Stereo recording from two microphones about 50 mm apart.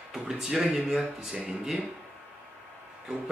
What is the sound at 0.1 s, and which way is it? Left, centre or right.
Speech, centre.